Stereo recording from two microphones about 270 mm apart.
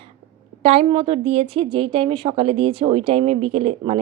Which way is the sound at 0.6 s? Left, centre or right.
Right.